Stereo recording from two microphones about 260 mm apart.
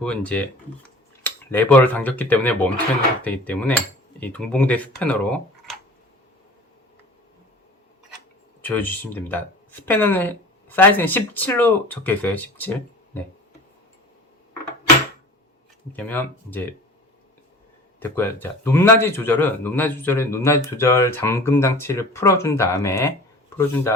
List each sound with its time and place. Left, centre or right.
0.0 s speech: centre
8.6 s speech: centre
15.9 s speech: centre
18.0 s speech: centre